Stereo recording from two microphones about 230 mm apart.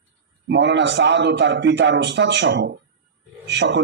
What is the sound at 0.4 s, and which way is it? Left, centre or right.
A man's voice, right.